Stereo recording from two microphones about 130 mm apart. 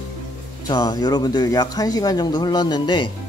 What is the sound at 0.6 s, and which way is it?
A man's voice, 30° left (ahead or behind).